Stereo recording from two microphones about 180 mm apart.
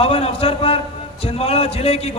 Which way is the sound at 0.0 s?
35° left (ahead or behind).